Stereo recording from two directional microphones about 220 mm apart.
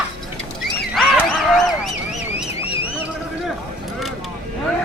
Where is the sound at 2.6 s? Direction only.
25° left (ahead or behind).